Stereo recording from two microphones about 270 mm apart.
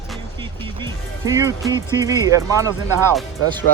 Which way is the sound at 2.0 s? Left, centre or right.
Centre.